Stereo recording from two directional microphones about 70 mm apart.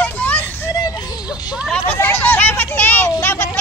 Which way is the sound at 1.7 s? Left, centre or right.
Left.